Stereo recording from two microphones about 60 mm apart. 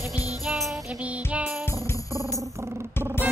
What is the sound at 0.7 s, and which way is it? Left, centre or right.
Music, right.